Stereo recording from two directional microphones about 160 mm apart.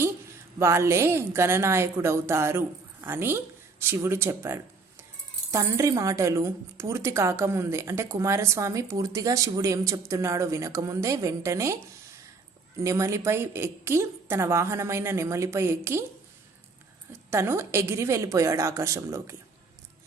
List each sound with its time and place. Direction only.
0.6 s a woman's voice: 15° right (ahead or behind)
12.8 s a woman's voice: 20° right (ahead or behind)
17.1 s a woman's voice: 15° right (ahead or behind)